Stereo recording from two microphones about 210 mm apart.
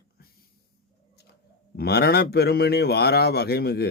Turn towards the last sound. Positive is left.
turn(degrees=50)  # may be behind; listen again after turning